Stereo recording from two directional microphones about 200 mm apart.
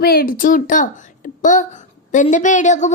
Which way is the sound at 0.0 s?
50° left (ahead or behind).